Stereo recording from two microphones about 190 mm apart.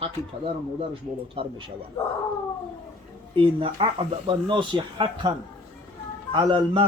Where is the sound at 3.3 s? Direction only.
30° right (ahead or behind).